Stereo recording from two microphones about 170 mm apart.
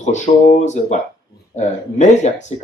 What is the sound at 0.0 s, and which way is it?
Speech, 45° left (ahead or behind).